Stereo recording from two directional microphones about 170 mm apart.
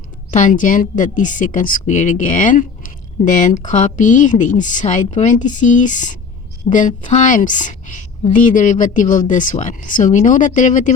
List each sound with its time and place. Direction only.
0.3 s a woman's voice: 45° left (ahead or behind)